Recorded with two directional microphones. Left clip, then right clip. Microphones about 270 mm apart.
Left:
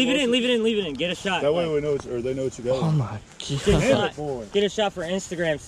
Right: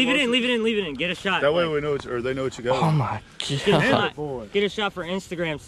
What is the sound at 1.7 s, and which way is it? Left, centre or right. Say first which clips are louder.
Speech: even; right.